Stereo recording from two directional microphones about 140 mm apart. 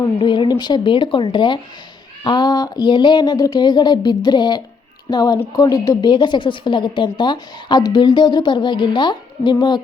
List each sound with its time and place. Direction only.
0.2 s a woman's voice: 35° left (ahead or behind)